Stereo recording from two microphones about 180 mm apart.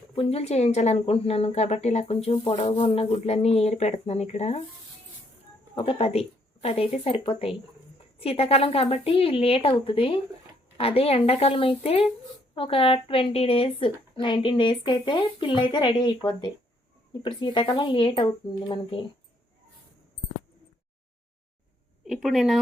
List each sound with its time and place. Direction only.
0.2 s a woman's voice: 35° left (ahead or behind)
5.7 s a woman's voice: 30° left (ahead or behind)
17.2 s a woman's voice: 25° left (ahead or behind)
22.0 s a woman's voice: centre (ahead or behind)